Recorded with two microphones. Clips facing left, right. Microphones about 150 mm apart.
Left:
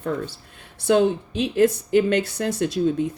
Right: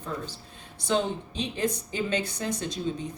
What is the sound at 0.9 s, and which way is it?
Speech, 60° left (ahead or behind).